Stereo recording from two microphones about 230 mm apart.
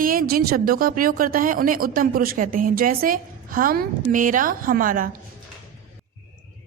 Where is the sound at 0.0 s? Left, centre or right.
Right.